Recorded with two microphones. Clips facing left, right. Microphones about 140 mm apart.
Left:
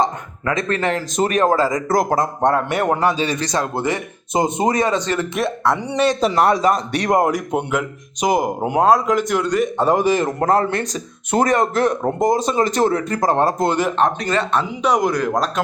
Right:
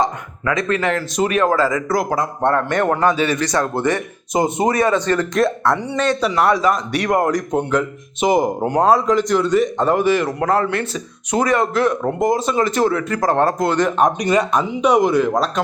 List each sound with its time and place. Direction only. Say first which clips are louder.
0.0 s a sound: even; 30° left (ahead or behind)
1.1 s speech: left 1 dB; 40° left (ahead or behind)
2.4 s a man's voice: right 3 dB; 15° left (ahead or behind)
3.2 s speech: right 2 dB; 35° left (ahead or behind)
3.6 s a man's voice: right 2 dB; 10° left (ahead or behind)
5.3 s speech: right 3 dB; centre (ahead or behind)
6.1 s speech: left 1 dB; 40° left (ahead or behind)
6.6 s speech: even; 30° left (ahead or behind)
7.2 s a man's voice: even; 10° left (ahead or behind)
9.8 s a man's voice: even; 15° left (ahead or behind)
10.1 s speech: even; 40° left (ahead or behind)
13.1 s a man's voice: right 1 dB; 20° left (ahead or behind)
14.0 s speech: right 3 dB; 15° right (ahead or behind)